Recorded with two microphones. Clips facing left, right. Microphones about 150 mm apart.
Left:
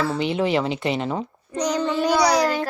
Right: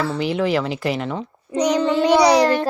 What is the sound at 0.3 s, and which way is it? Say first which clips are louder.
Speech: right 1 dB; 30° left (ahead or behind).